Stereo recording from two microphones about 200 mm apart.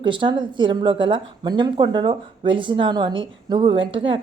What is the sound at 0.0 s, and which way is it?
Speech, 25° right (ahead or behind).